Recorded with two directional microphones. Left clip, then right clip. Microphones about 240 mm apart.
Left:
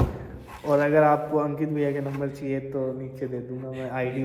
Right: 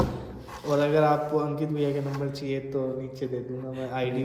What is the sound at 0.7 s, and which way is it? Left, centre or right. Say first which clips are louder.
A man's voice: left 3 dB; centre.